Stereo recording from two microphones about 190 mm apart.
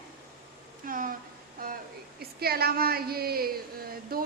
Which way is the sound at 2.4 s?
55° right (ahead or behind).